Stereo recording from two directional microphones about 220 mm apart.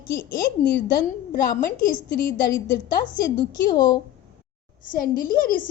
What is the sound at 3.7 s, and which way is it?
Speech, 15° left (ahead or behind).